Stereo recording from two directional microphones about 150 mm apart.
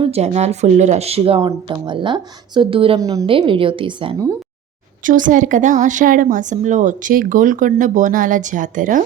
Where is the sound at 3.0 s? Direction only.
25° right (ahead or behind).